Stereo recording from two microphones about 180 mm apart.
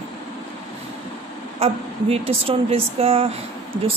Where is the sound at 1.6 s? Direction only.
35° right (ahead or behind).